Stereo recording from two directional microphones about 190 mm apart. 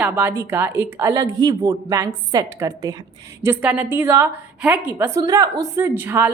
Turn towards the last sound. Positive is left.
turn(degrees=-10)  # may be behind; listen again after turning